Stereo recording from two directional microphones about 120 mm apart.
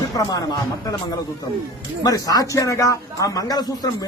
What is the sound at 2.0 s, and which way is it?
A man's voice, 30° left (ahead or behind).